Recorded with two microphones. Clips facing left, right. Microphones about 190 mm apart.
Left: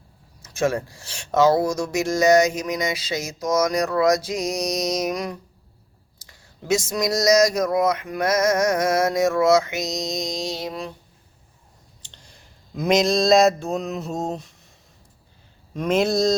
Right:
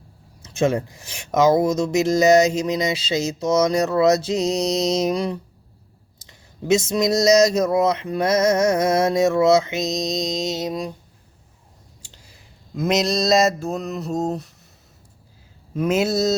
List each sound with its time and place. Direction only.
0.4 s speech: 20° right (ahead or behind)
12.0 s a sound: 5° right (ahead or behind)
15.7 s speech: 5° right (ahead or behind)